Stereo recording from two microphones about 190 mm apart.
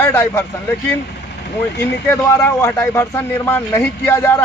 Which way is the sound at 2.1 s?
10° left (ahead or behind).